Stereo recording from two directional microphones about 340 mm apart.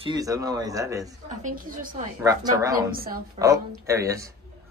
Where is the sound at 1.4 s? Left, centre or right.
Right.